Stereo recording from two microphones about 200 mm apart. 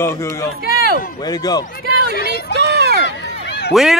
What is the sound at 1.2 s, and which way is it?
Speech, 20° left (ahead or behind).